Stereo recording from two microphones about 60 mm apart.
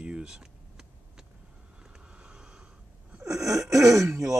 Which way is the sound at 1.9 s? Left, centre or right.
Centre.